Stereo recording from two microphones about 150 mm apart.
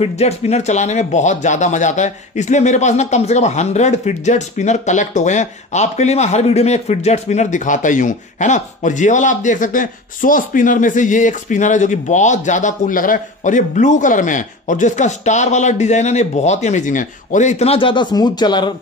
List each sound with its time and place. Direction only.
0.0 s speech: 45° left (ahead or behind); by 18.7 s 30° left (ahead or behind)